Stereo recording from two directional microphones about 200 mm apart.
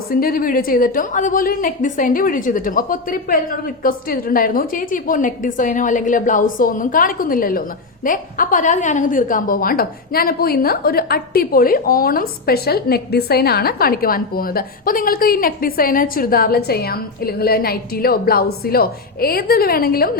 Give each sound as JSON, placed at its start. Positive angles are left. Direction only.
{"t": 0.1, "sound": "a woman's voice", "side_deg": 45}